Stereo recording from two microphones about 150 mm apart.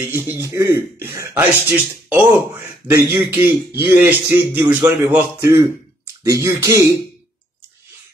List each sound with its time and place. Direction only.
0.0 s speech: 15° right (ahead or behind)